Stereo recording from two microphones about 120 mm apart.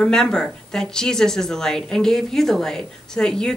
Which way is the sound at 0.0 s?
5° left (ahead or behind).